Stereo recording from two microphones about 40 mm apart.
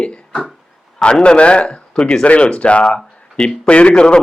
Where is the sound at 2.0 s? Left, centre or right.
Centre.